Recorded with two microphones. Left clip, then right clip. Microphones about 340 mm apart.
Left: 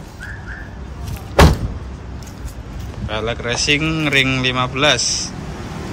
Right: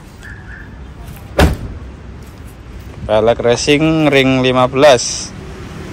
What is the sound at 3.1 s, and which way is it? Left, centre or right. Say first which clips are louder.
Speech: right 11 dB; centre.